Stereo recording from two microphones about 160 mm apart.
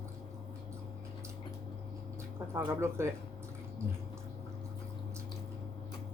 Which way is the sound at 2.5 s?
15° right (ahead or behind).